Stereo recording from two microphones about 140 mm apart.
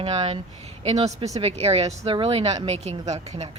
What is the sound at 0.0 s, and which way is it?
Speech, 45° right (ahead or behind).